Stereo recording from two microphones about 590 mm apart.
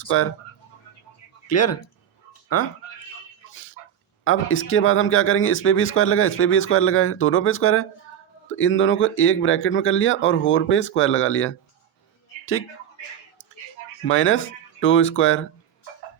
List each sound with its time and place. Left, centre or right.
0.0 s speech: left
1.5 s speech: left
4.2 s speech: centre
14.0 s speech: centre